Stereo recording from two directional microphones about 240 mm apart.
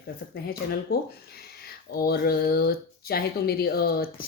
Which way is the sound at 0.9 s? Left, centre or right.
Left.